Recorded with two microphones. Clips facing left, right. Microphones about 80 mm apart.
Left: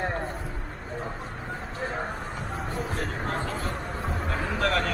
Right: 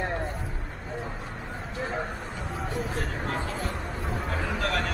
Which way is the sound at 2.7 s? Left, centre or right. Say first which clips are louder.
Even; left.